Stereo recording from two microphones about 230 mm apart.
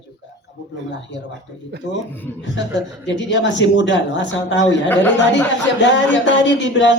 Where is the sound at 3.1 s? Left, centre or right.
Left.